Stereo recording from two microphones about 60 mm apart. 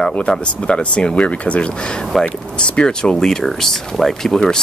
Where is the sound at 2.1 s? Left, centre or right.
Centre.